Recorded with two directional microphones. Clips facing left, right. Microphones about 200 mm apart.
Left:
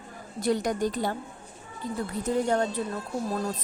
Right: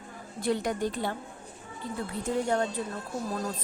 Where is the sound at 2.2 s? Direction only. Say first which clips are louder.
Left 2 dB; 40° left (ahead or behind).